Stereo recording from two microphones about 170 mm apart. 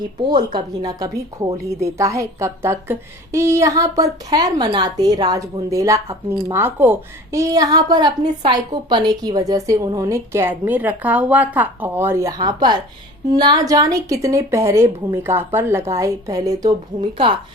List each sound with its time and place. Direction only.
0.2 s a woman's voice: 25° right (ahead or behind)